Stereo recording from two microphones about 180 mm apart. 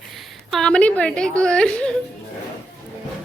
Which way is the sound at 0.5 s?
5° left (ahead or behind).